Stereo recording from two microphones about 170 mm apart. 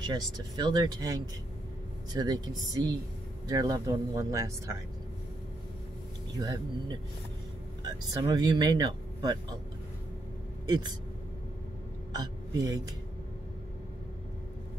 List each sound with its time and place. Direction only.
0.0 s speech: 25° right (ahead or behind)
6.3 s speech: 20° right (ahead or behind)
10.7 s speech: 25° right (ahead or behind)
12.1 s speech: 20° right (ahead or behind)